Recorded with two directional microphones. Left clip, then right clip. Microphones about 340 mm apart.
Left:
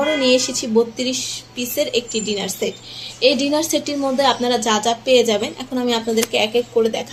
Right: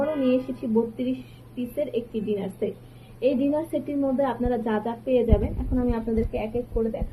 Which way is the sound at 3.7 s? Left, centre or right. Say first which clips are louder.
Left 6 dB; left.